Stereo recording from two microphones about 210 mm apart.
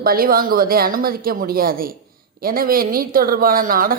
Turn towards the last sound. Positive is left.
turn(degrees=-40)  # may be behind; listen again after turning